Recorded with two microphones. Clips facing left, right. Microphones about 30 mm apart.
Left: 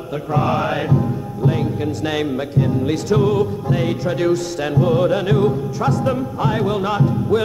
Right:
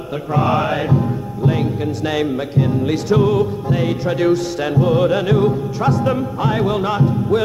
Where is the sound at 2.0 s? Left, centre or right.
Centre.